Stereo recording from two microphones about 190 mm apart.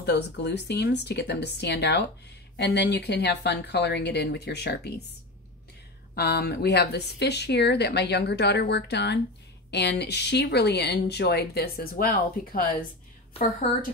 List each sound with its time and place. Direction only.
0.0 s speech: 60° left (ahead or behind)
6.1 s a woman's voice: 55° left (ahead or behind)